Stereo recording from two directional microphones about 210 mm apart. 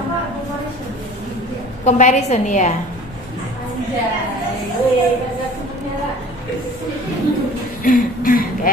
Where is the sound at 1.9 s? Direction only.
35° left (ahead or behind).